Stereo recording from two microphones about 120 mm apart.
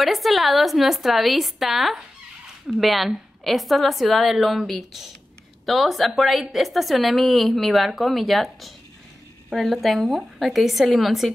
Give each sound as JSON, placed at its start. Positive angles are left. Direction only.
{"t": 0.0, "sound": "speech", "side_deg": 0}